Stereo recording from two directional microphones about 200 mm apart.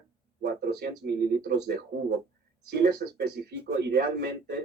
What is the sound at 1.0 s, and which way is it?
A man's voice, 50° right (ahead or behind).